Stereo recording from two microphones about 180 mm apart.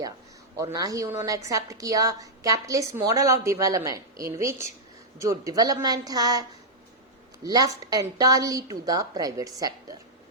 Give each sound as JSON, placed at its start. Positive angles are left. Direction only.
{"t": 0.5, "sound": "a woman's voice", "side_deg": -20}
{"t": 7.4, "sound": "a woman's voice", "side_deg": -20}